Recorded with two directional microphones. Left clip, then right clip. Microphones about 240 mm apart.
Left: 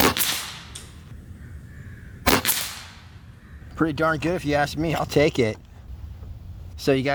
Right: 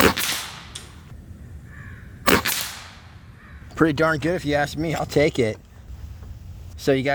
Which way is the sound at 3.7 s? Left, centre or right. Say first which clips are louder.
Right 4 dB; right.